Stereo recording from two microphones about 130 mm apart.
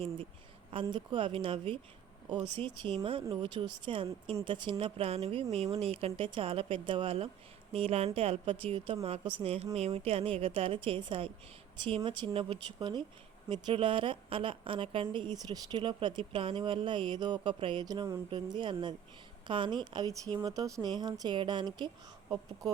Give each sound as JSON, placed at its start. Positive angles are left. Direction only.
{"t": 0.7, "sound": "a woman's voice", "side_deg": -40}
{"t": 18.5, "sound": "a woman's voice", "side_deg": -40}